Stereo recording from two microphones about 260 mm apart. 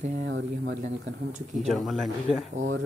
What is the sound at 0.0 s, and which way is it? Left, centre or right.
Speech, right.